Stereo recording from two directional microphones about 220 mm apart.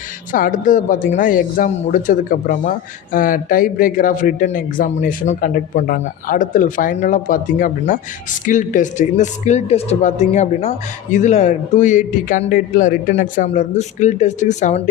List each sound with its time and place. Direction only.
0.3 s speech: 35° left (ahead or behind)